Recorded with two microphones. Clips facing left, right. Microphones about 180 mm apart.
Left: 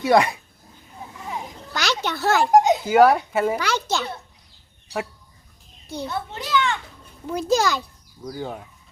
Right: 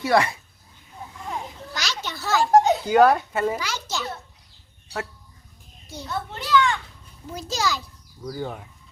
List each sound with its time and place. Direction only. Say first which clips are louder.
0.0 s a child's voice: left 3 dB; 20° left (ahead or behind)
1.7 s a sound: left 8 dB; 60° left (ahead or behind)
2.5 s a sound: even; 15° left (ahead or behind)
2.8 s speech: left 1 dB; 5° left (ahead or behind)
3.6 s a child's voice: left 6 dB; 65° left (ahead or behind)
6.1 s a child's voice: right 3 dB; 20° left (ahead or behind)
7.3 s a child's voice: left 7 dB; 60° left (ahead or behind)
8.2 s speech: even; 5° left (ahead or behind)